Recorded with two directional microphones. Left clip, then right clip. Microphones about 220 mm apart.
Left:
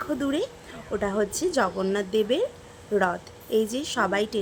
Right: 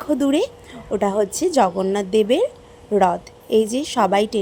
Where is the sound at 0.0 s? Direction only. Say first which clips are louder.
Right 8 dB; 20° right (ahead or behind).